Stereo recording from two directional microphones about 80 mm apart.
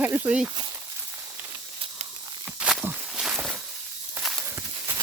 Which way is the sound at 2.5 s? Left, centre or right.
Centre.